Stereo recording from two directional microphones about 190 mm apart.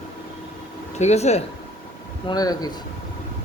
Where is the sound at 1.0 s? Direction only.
35° left (ahead or behind).